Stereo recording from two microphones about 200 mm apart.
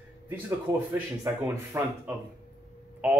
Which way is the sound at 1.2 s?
15° right (ahead or behind).